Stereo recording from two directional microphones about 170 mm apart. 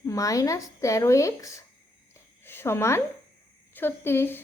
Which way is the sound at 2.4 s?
15° left (ahead or behind).